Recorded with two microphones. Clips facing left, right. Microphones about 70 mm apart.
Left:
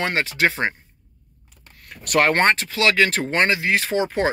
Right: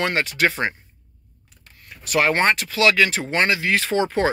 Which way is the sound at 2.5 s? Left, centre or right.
Left.